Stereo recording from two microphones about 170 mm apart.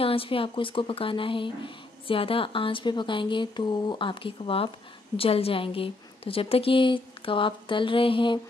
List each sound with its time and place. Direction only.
0.0 s speech: 35° left (ahead or behind)